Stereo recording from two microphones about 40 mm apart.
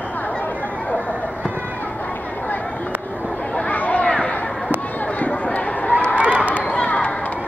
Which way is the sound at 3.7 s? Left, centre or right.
Left.